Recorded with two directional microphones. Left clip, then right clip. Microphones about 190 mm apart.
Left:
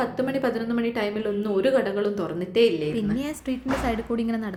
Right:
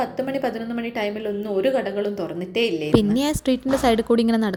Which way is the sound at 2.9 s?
45° right (ahead or behind).